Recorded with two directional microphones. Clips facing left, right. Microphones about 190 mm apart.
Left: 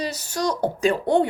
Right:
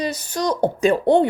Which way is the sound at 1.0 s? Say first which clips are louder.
Right 4 dB; 25° right (ahead or behind).